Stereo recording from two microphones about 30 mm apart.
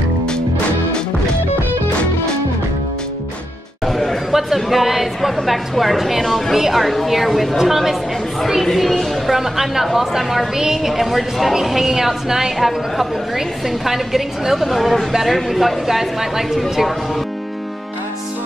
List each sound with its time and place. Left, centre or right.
3.8 s chatter: centre
4.3 s a sound: centre
4.6 s a woman's voice: centre
9.3 s speech: centre
10.9 s a woman's voice: centre
12.5 s a woman's voice: centre